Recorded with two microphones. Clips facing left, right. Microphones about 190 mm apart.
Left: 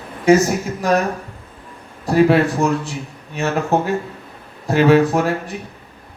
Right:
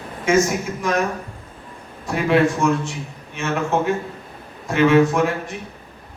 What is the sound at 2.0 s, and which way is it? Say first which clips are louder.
Speech: left 4 dB; 35° left (ahead or behind).